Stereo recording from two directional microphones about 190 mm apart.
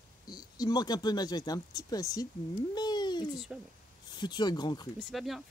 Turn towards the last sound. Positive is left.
turn(degrees=0)  # may be behind; listen again after turning